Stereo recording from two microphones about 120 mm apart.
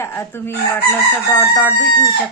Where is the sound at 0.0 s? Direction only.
20° left (ahead or behind).